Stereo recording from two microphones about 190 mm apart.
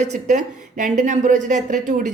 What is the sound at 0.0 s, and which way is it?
Speech, 40° right (ahead or behind).